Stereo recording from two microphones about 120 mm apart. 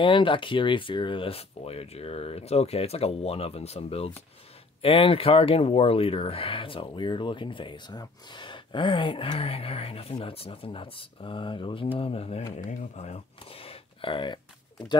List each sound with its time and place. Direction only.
0.0 s speech: 45° left (ahead or behind)
12.5 s speech: 80° left; by 14.4 s 45° left (ahead or behind)